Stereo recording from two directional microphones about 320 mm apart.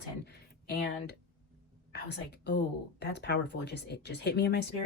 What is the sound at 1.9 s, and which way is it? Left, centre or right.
A woman's voice, left.